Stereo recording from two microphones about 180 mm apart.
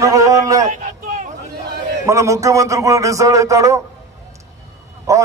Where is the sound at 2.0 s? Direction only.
15° right (ahead or behind).